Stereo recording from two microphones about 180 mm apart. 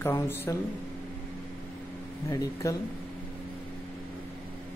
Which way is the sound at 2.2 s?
20° left (ahead or behind).